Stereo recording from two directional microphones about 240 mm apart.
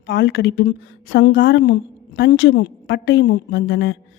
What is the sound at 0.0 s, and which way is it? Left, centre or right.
Speech, left.